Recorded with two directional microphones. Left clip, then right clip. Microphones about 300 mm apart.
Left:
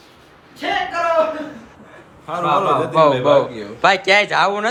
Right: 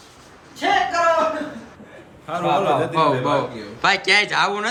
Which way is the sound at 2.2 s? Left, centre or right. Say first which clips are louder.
Left 2 dB; centre.